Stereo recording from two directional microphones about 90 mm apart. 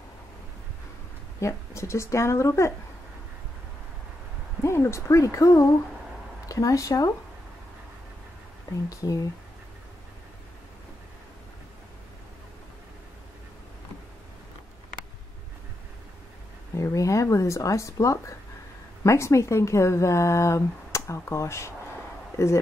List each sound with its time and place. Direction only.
1.4 s speech: 35° left (ahead or behind)
4.6 s speech: 30° left (ahead or behind)
8.8 s speech: 40° left (ahead or behind)
16.7 s speech: 35° left (ahead or behind)